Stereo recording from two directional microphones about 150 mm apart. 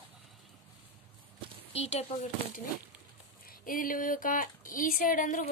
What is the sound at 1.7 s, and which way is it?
Speech, 45° left (ahead or behind).